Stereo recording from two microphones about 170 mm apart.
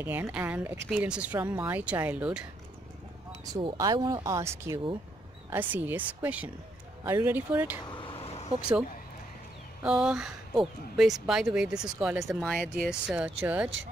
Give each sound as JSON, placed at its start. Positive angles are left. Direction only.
{"t": 0.0, "sound": "speech", "side_deg": -10}
{"t": 3.5, "sound": "speech", "side_deg": -20}
{"t": 7.9, "sound": "vehicle", "side_deg": 30}
{"t": 9.8, "sound": "speech", "side_deg": -5}